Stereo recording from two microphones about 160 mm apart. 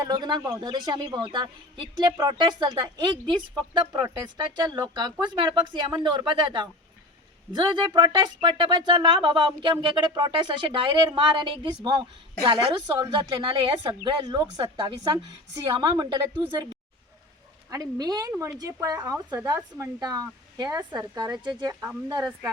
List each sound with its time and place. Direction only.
0.0 s speech: 25° right (ahead or behind)
17.7 s speech: 25° right (ahead or behind)
19.5 s speech: 10° right (ahead or behind)
20.0 s speech: 25° right (ahead or behind)